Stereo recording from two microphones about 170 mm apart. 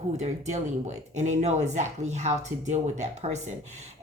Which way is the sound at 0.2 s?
40° right (ahead or behind).